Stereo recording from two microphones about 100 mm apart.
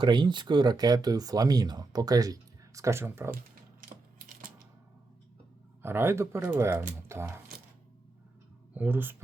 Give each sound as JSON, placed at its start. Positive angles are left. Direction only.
{"t": 0.0, "sound": "speech", "side_deg": -50}
{"t": 5.8, "sound": "speech", "side_deg": -25}
{"t": 8.7, "sound": "speech", "side_deg": -20}